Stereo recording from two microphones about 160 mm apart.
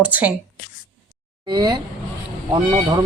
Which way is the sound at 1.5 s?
25° right (ahead or behind).